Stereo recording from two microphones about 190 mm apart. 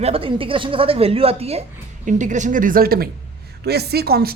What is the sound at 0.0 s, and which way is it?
A woman's voice, 30° right (ahead or behind).